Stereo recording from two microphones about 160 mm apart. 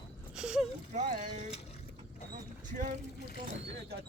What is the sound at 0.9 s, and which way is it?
Speech, 45° right (ahead or behind).